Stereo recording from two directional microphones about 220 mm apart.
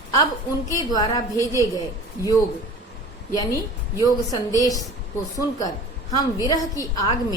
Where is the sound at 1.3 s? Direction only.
15° right (ahead or behind).